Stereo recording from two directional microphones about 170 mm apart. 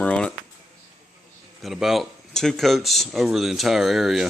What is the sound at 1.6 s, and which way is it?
Speech, centre (ahead or behind).